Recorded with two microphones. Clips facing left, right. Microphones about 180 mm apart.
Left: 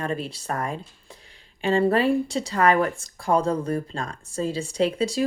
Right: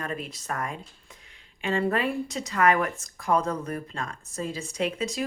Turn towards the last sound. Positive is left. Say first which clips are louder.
# left 6 dB
turn(degrees=30)  # may be behind; listen again after turning